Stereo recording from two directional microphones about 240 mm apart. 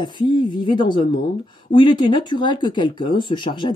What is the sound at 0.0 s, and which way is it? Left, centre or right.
Speech, centre.